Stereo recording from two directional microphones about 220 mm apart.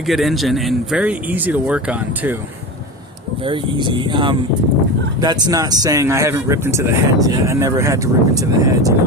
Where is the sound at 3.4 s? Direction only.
25° right (ahead or behind).